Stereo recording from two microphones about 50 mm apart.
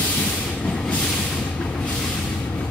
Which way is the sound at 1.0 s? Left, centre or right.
Centre.